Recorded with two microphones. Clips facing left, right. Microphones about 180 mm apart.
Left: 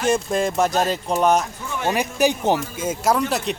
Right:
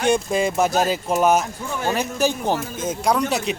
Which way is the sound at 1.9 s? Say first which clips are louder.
Left 2 dB; 15° left (ahead or behind).